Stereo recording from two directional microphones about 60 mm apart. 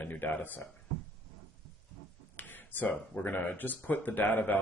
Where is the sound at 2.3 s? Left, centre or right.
Left.